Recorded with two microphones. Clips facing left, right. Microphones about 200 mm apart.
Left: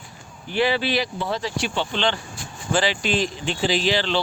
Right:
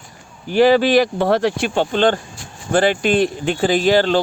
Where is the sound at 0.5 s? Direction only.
45° right (ahead or behind).